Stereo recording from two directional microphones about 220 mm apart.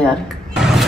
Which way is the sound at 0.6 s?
Centre (ahead or behind).